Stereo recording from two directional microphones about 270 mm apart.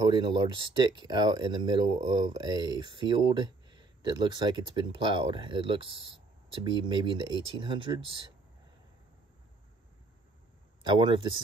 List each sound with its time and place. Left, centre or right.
0.0 s speech: centre
10.8 s speech: centre